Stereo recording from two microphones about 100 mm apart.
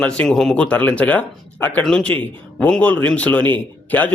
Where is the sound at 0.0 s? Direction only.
10° left (ahead or behind).